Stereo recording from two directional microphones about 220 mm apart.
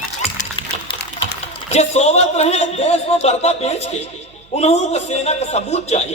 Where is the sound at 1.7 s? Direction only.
30° left (ahead or behind).